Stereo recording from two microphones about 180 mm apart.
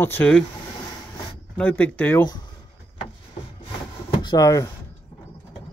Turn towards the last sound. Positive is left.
turn(degrees=20)  # may be behind; listen again after turning